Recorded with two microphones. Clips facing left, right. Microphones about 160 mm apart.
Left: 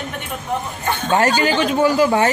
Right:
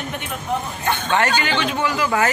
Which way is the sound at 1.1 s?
35° left (ahead or behind).